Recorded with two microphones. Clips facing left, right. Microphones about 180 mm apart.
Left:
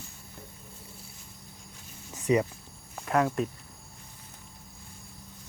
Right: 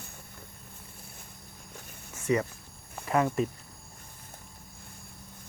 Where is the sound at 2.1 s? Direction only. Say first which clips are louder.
Left 3 dB; 15° left (ahead or behind).